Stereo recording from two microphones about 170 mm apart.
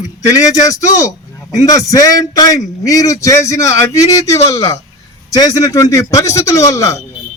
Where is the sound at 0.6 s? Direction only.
20° left (ahead or behind).